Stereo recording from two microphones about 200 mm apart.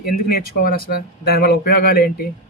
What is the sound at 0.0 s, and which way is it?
Speech, 50° left (ahead or behind).